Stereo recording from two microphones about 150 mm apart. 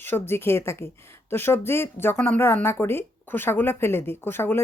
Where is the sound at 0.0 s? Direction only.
15° left (ahead or behind).